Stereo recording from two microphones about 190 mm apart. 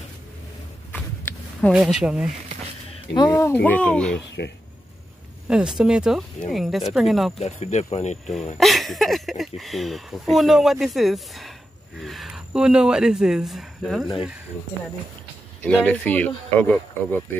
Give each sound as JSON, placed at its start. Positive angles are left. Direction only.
{"t": 1.7, "sound": "speech", "side_deg": -5}
{"t": 3.2, "sound": "speech", "side_deg": 15}
{"t": 5.5, "sound": "speech", "side_deg": -5}
{"t": 7.3, "sound": "speech", "side_deg": 35}
{"t": 8.5, "sound": "speech", "side_deg": 0}
{"t": 15.6, "sound": "speech", "side_deg": 5}